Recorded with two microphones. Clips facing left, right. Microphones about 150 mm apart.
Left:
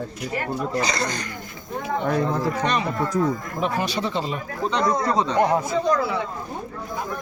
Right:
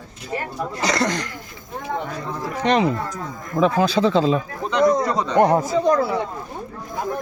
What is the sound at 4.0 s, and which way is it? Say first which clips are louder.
Speech: right 8 dB; 90° right.